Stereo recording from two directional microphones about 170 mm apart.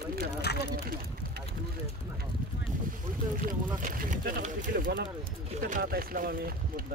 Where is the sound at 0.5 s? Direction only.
75° left (ahead or behind).